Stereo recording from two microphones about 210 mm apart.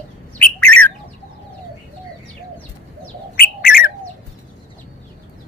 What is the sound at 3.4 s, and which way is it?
Bird, 45° left (ahead or behind).